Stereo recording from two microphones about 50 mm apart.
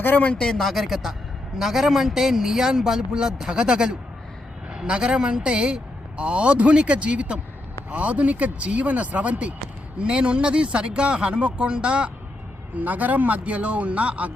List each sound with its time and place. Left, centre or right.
0.0 s speech: left
0.3 s a man's voice: centre; by 12.1 s right
12.7 s speech: right